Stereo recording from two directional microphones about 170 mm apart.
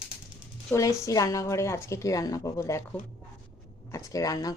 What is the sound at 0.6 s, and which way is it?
A woman's voice, 20° left (ahead or behind).